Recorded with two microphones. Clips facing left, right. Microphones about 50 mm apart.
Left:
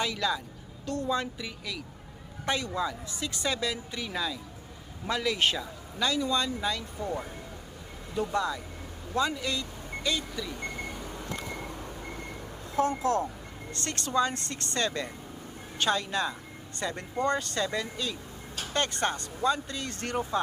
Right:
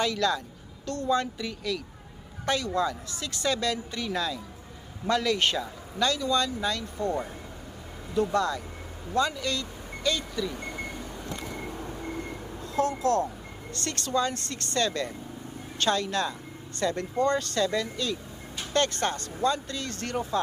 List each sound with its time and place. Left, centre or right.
0.0 s speech: centre
6.1 s speech: centre
13.0 s speech: left